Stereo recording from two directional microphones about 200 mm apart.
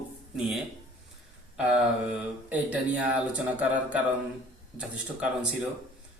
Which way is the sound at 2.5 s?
5° right (ahead or behind).